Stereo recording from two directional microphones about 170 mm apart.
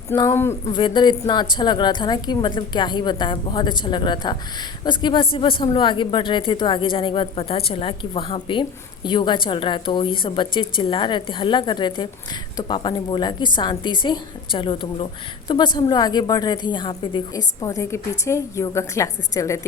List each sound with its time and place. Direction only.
0.2 s speech: 15° left (ahead or behind)
0.7 s a woman's voice: 30° left (ahead or behind)